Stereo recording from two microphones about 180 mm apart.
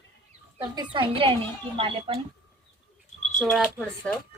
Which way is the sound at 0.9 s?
30° right (ahead or behind).